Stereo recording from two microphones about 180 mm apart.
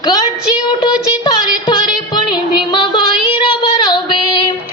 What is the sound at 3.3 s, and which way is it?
Child singing, 30° left (ahead or behind).